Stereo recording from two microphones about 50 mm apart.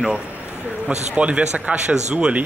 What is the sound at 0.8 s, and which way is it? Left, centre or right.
A man's voice, right.